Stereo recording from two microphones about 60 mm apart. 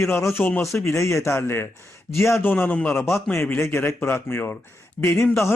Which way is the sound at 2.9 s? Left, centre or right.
Left.